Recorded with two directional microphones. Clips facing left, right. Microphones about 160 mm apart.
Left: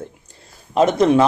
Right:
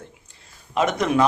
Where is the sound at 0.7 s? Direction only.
30° left (ahead or behind).